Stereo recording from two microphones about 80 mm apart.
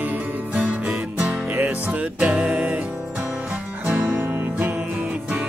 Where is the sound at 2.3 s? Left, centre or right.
Centre.